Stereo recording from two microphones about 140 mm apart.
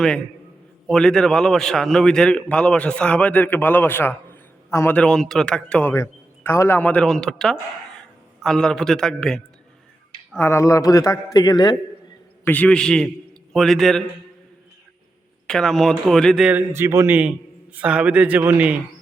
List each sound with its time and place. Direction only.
0.9 s a man's voice: 5° left (ahead or behind); by 4.9 s 20° left (ahead or behind)
4.9 s a man's voice: 5° left (ahead or behind)
5.9 s a man's voice: 20° left (ahead or behind); by 9.4 s 5° left (ahead or behind)
10.3 s a man's voice: 20° left (ahead or behind)
12.5 s a man's voice: 10° left (ahead or behind)
15.4 s a man's voice: 5° left (ahead or behind); by 18.8 s 10° right (ahead or behind)